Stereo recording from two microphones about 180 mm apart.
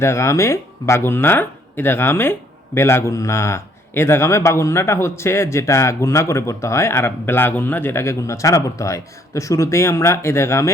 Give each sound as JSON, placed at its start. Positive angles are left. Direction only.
{"t": 0.0, "sound": "speech", "side_deg": 15}